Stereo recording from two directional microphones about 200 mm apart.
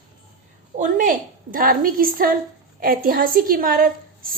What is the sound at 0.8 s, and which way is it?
A woman's voice, 45° right (ahead or behind).